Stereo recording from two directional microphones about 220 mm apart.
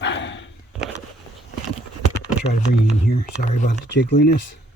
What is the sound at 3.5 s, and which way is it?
Speech, 35° left (ahead or behind).